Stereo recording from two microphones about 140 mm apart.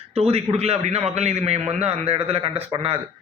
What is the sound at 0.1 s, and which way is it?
A man's voice, 45° right (ahead or behind).